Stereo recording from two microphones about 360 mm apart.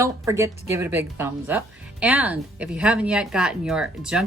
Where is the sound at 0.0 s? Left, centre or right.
Centre.